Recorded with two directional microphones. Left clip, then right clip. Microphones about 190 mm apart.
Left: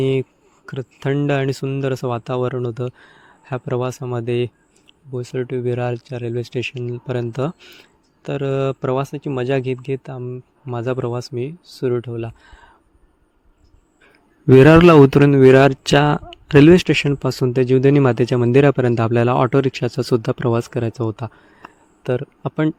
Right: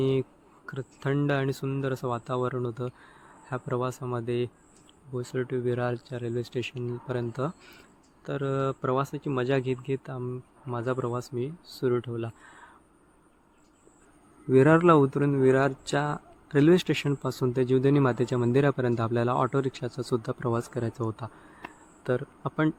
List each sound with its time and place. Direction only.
0.0 s speech: 40° left (ahead or behind)
14.5 s speech: 60° left (ahead or behind); by 22.7 s 35° left (ahead or behind)